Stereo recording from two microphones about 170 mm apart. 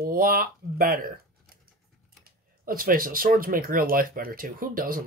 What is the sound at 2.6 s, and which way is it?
Speech, 55° right (ahead or behind).